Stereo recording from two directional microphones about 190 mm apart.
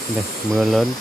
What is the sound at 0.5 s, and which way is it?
Speech, centre (ahead or behind).